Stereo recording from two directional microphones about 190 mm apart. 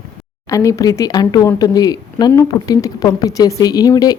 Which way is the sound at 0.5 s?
15° left (ahead or behind).